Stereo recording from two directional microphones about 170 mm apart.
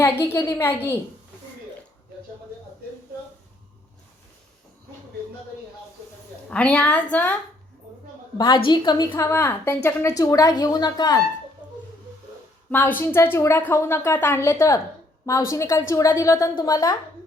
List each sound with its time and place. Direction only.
0.0 s a woman's voice: 10° left (ahead or behind)
6.5 s a woman's voice: 5° left (ahead or behind)
8.4 s a woman's voice: 30° left (ahead or behind)
12.7 s a woman's voice: 10° left (ahead or behind)